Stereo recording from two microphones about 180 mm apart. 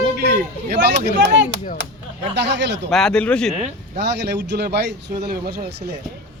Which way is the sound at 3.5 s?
35° right (ahead or behind).